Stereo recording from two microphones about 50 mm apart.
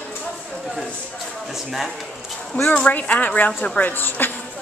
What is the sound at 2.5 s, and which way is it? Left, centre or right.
Speech, left.